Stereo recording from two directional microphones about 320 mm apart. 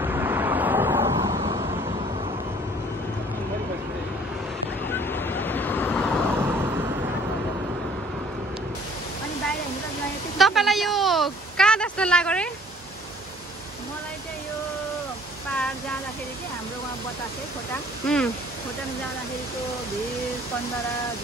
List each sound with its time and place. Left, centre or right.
0.0 s vehicle: centre
4.8 s waves: centre
10.3 s a sound: centre
18.0 s speech: centre